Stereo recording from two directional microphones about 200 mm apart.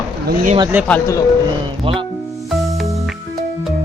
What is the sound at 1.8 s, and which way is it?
Speech, 25° right (ahead or behind).